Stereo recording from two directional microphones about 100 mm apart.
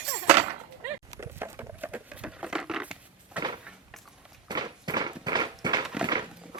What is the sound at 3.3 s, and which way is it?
Cupboard open or close, 50° right (ahead or behind).